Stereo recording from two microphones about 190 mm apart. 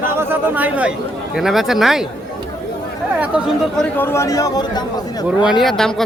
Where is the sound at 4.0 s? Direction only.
15° left (ahead or behind).